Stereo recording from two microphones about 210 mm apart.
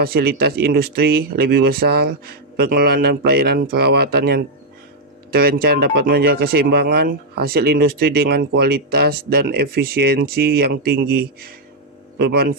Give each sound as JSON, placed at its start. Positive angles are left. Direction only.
{"t": 0.0, "sound": "speech", "side_deg": -45}